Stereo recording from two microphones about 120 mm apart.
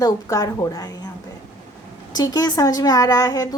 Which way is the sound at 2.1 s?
30° left (ahead or behind).